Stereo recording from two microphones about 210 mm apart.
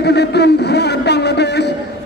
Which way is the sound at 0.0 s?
50° left (ahead or behind).